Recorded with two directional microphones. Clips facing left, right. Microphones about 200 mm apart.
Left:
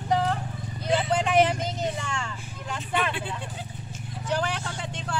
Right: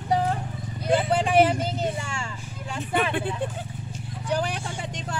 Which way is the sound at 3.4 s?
55° right (ahead or behind).